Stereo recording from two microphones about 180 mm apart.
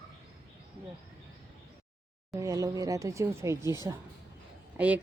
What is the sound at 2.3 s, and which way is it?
A woman's voice, 20° right (ahead or behind).